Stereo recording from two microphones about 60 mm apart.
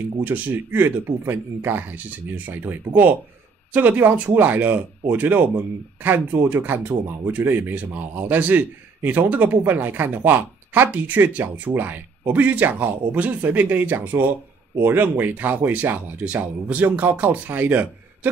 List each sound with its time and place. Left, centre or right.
0.2 s speech: right